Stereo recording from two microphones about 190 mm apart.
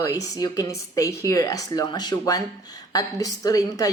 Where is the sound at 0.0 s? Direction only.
20° left (ahead or behind).